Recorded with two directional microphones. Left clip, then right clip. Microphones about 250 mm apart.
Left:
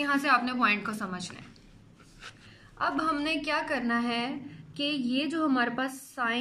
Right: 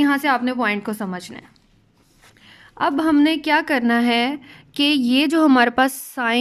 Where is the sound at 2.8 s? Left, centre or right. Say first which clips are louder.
Right 11 dB; right.